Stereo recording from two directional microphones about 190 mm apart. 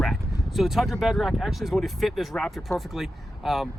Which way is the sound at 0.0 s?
Centre (ahead or behind).